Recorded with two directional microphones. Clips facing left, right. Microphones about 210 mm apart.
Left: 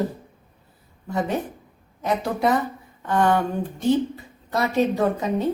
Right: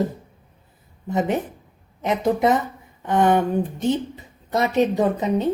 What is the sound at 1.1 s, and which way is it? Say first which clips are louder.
A woman's voice: right 3 dB; 20° right (ahead or behind).